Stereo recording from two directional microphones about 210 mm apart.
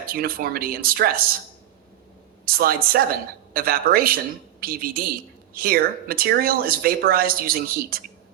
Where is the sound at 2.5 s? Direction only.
45° right (ahead or behind).